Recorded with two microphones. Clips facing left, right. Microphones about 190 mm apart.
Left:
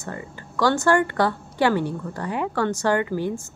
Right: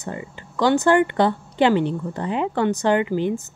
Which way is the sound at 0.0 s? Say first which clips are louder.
Right 2 dB; 20° right (ahead or behind).